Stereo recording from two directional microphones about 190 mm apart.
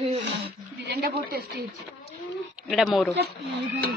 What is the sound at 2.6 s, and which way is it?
Speech, centre (ahead or behind).